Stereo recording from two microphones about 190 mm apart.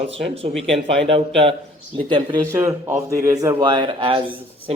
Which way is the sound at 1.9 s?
25° right (ahead or behind).